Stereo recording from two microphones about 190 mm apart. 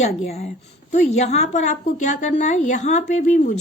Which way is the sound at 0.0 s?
35° left (ahead or behind).